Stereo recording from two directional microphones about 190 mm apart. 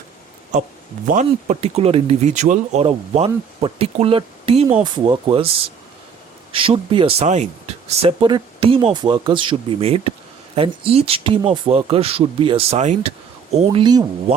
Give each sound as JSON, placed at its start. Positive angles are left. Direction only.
{"t": 1.0, "sound": "speech", "side_deg": -40}
{"t": 6.5, "sound": "speech", "side_deg": -30}